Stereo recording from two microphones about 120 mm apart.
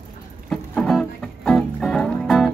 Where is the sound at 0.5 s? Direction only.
5° left (ahead or behind).